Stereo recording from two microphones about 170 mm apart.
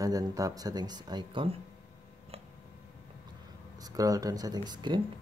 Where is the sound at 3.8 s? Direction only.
20° right (ahead or behind).